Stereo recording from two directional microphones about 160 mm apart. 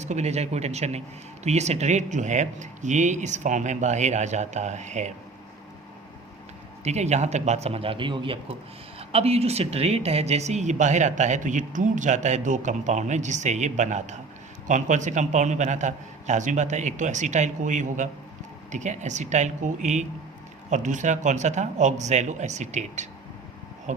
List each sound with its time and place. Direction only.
0.0 s a woman's voice: 45° right (ahead or behind)
6.8 s a man's voice: 45° right (ahead or behind)